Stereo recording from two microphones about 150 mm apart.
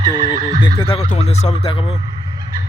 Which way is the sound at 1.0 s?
45° left (ahead or behind).